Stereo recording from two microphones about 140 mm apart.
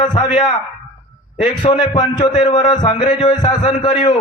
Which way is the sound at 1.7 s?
30° left (ahead or behind).